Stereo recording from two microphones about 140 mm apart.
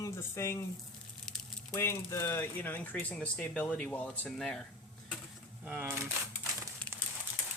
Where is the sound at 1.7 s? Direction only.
20° left (ahead or behind); by 4.6 s 5° left (ahead or behind).